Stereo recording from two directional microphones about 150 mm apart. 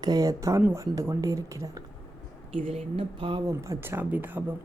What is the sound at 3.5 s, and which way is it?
Speech, 20° right (ahead or behind).